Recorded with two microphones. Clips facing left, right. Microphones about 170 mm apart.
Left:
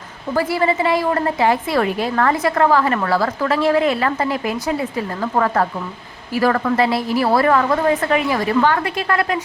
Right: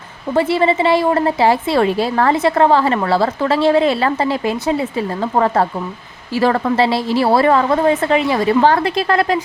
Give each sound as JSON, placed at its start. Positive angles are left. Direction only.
{"t": 0.3, "sound": "a woman's voice", "side_deg": -25}